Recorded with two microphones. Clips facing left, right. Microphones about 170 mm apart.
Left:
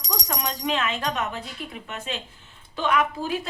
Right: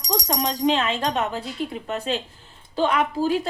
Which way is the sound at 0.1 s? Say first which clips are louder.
Right 6 dB; 30° right (ahead or behind).